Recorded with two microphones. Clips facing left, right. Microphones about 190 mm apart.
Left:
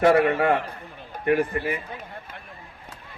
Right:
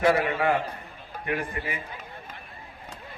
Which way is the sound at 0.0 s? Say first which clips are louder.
Left 4 dB; 60° left (ahead or behind).